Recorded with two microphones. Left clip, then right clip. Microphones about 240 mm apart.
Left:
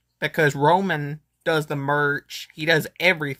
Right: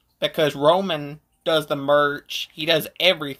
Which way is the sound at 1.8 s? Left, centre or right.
Left.